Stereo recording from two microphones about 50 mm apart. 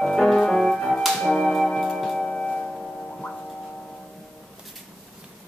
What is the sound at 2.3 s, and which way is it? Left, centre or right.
Music, centre.